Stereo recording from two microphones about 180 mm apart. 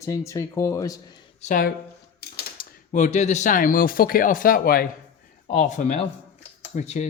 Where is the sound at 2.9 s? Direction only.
40° left (ahead or behind).